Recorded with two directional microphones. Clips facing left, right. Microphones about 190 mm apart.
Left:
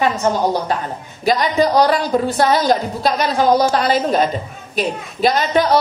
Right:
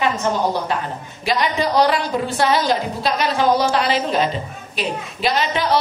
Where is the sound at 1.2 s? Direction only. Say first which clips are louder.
Left 5 dB; 40° left (ahead or behind).